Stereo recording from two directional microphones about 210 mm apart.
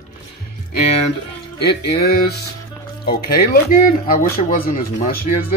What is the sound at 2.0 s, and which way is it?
Speech, 50° left (ahead or behind).